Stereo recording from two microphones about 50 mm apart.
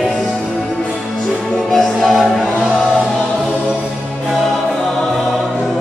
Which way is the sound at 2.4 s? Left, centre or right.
Centre.